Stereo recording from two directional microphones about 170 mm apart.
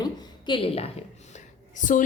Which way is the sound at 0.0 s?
25° left (ahead or behind).